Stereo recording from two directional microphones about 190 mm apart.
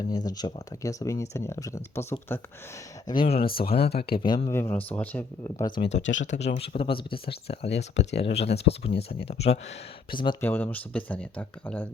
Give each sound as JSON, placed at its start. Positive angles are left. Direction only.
{"t": 0.1, "sound": "speech", "side_deg": 20}
{"t": 3.1, "sound": "speech", "side_deg": 30}
{"t": 3.4, "sound": "speech", "side_deg": 50}
{"t": 4.2, "sound": "speech", "side_deg": 25}
{"t": 6.0, "sound": "speech", "side_deg": 75}
{"t": 6.6, "sound": "speech", "side_deg": 30}
{"t": 10.4, "sound": "speech", "side_deg": 10}